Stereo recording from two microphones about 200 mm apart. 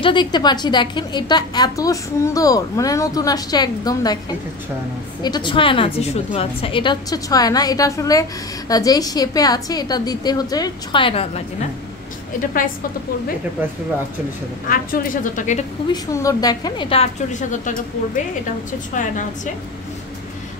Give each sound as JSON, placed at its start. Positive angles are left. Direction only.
{"t": 0.0, "sound": "a woman's voice", "side_deg": 25}
{"t": 5.2, "sound": "a woman's voice", "side_deg": 20}
{"t": 14.7, "sound": "a woman's voice", "side_deg": 45}
{"t": 15.9, "sound": "a woman's voice", "side_deg": 15}